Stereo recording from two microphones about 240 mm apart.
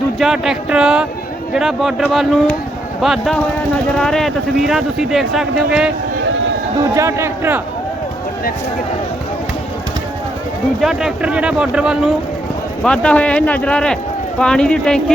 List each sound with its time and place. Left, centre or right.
0.2 s speech: centre
6.2 s run: right
6.9 s a man's voice: centre
10.8 s speech: centre